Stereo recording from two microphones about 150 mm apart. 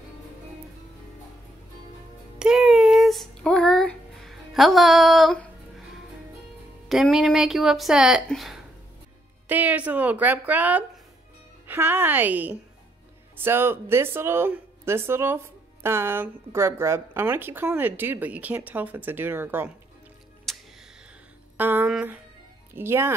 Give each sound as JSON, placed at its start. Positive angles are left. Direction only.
{"t": 2.3, "sound": "a sound", "side_deg": -5}
{"t": 6.9, "sound": "speech", "side_deg": 0}
{"t": 20.5, "sound": "music", "side_deg": 0}
{"t": 21.5, "sound": "speech", "side_deg": -15}